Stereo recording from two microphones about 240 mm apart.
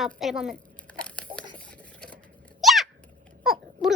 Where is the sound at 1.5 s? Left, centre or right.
Centre.